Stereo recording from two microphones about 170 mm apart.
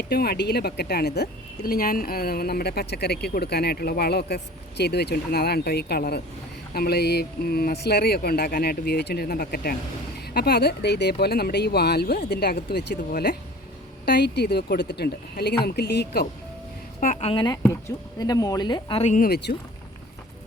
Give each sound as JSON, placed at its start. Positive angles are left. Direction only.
{"t": 0.1, "sound": "speech", "side_deg": 65}
{"t": 14.0, "sound": "speech", "side_deg": 80}
{"t": 17.2, "sound": "a woman's voice", "side_deg": 35}
{"t": 17.4, "sound": "speech", "side_deg": 20}
{"t": 19.0, "sound": "speech", "side_deg": 50}
{"t": 19.3, "sound": "speech", "side_deg": 75}